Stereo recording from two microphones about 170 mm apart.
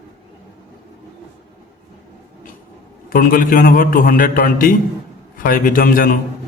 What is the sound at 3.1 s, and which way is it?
A man's voice, 55° left (ahead or behind).